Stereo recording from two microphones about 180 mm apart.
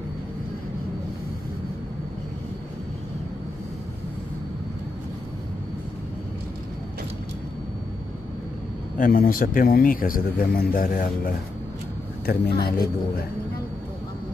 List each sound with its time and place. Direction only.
8.9 s speech: 50° left (ahead or behind)